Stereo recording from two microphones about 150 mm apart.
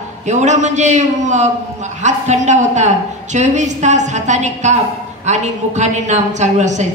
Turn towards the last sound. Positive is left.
turn(degrees=-50)  # may be behind; listen again after turning